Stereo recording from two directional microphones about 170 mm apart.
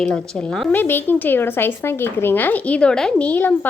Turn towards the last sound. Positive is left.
turn(degrees=10)  # may be behind; listen again after turning